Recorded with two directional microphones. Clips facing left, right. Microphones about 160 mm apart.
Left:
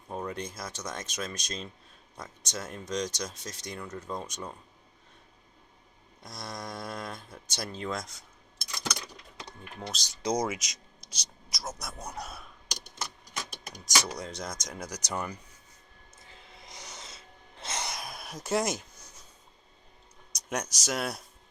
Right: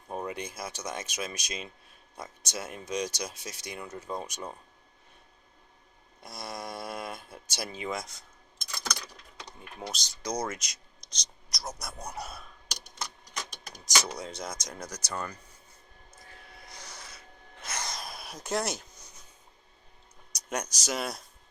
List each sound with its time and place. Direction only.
0.1 s speech: 10° right (ahead or behind)
6.2 s speech: 5° right (ahead or behind)
8.8 s a sound: 10° left (ahead or behind)
10.2 s speech: 15° left (ahead or behind)
10.6 s a sound: centre (ahead or behind)
13.8 s speech: centre (ahead or behind)
14.8 s speech: 15° left (ahead or behind)
16.1 s gasp: 20° left (ahead or behind)
17.9 s a sound: centre (ahead or behind)
20.3 s speech: centre (ahead or behind)